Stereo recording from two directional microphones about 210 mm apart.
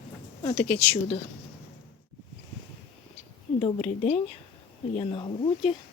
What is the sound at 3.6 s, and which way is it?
Speech, 30° left (ahead or behind).